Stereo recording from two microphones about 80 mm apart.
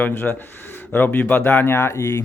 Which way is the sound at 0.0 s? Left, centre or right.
Left.